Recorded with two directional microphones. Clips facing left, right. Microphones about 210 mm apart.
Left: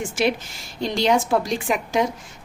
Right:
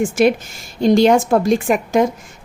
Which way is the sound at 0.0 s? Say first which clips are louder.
Right 8 dB; 45° right (ahead or behind).